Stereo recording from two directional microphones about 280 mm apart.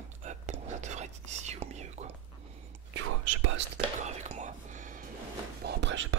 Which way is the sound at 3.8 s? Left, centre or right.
Right.